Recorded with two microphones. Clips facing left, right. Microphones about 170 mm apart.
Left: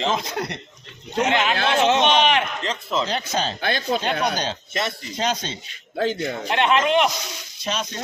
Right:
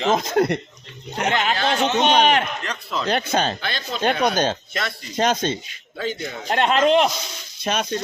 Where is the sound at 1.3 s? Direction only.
40° right (ahead or behind).